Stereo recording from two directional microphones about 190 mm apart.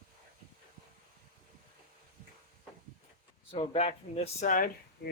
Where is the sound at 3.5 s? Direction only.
30° left (ahead or behind).